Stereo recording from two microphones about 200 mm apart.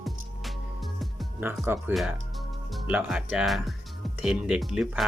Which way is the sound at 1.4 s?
10° right (ahead or behind).